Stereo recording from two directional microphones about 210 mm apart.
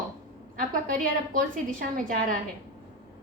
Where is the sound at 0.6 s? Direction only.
40° right (ahead or behind).